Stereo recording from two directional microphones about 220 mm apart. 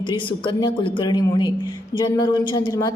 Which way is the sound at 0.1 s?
20° left (ahead or behind).